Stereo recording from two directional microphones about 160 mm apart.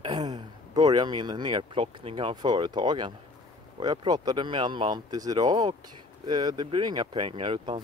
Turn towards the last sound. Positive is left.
turn(degrees=-30)  # may be behind; listen again after turning